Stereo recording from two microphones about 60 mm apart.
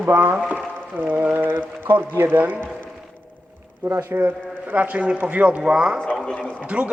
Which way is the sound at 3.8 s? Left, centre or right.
Right.